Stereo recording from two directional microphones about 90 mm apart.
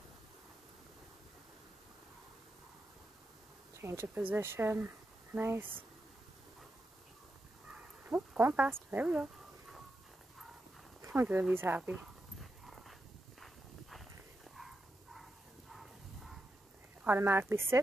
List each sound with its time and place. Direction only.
3.7 s speech: 30° right (ahead or behind)
8.1 s speech: 25° right (ahead or behind)
11.0 s speech: 25° right (ahead or behind)
12.4 s dog: centre (ahead or behind)
13.4 s walk: centre (ahead or behind)
15.7 s a sound: 5° right (ahead or behind)
17.0 s speech: 25° right (ahead or behind)